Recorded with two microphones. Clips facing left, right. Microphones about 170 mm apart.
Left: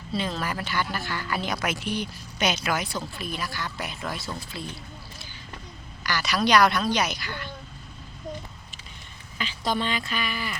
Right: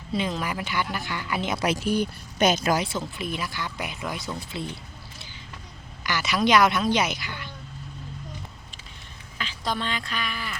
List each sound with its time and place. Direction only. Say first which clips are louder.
0.1 s a woman's voice: right 1 dB; 15° right (ahead or behind)
1.7 s speech: right 5 dB; 45° right (ahead or behind)
2.7 s speech: right 3 dB; 25° right (ahead or behind)
6.0 s speech: right 1 dB; 20° right (ahead or behind)
9.4 s a woman's voice: left 2 dB; centre (ahead or behind)